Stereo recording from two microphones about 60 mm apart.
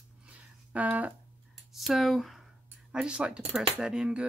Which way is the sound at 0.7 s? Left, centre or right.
Right.